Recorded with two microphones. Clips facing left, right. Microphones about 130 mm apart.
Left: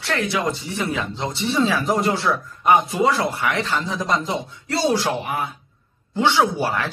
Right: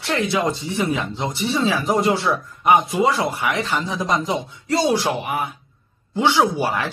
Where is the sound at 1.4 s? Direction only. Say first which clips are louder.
Left 1 dB; centre (ahead or behind).